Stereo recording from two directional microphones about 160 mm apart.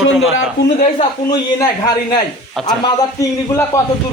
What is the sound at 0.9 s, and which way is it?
Speech, 25° left (ahead or behind).